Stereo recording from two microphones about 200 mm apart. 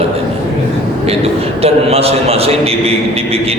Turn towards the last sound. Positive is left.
turn(degrees=-30)  # may be behind; listen again after turning